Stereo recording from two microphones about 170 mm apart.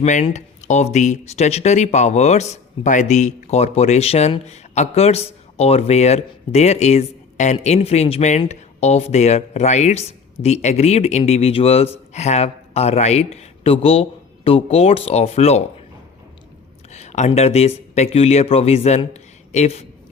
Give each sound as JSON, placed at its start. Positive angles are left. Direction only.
{"t": 0.0, "sound": "speech", "side_deg": 45}
{"t": 16.9, "sound": "speech", "side_deg": 40}